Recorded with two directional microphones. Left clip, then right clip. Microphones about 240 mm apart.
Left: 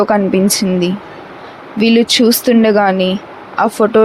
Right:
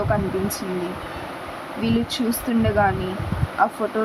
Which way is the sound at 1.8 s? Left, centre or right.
Left.